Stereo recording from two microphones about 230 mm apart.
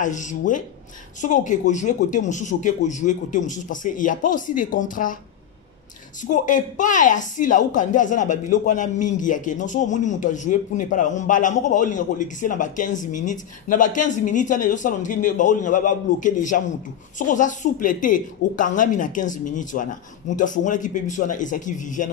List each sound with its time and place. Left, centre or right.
0.0 s speech: left
6.3 s speech: left